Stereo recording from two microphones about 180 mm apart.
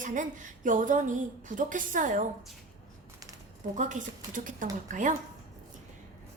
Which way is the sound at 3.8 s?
45° right (ahead or behind).